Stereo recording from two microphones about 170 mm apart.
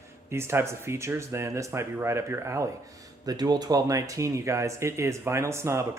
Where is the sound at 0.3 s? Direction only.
15° right (ahead or behind).